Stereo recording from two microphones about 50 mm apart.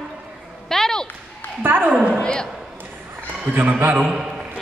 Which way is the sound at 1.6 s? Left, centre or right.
Right.